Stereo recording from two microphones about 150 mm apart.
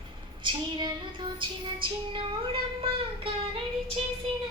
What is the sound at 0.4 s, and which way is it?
Child singing, 30° right (ahead or behind).